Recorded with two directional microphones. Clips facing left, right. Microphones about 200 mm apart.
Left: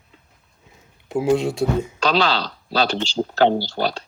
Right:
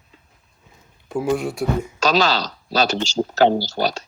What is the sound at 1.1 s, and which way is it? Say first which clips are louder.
Speech: left 3 dB; 25° left (ahead or behind).